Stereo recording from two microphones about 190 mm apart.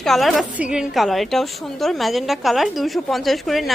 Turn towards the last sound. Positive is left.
turn(degrees=0)  # may be behind; listen again after turning